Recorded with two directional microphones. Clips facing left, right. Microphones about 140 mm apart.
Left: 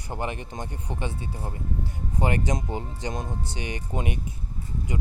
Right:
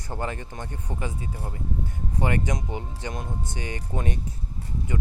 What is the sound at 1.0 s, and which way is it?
Speech, 30° left (ahead or behind).